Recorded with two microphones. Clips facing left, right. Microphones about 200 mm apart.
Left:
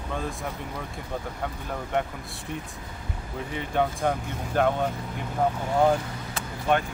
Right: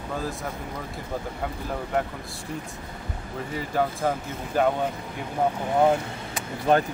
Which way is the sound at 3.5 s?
Centre (ahead or behind).